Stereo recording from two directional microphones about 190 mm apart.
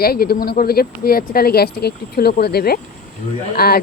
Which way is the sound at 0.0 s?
55° left (ahead or behind).